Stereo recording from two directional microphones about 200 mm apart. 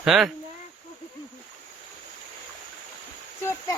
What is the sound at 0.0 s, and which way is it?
Speech, centre (ahead or behind).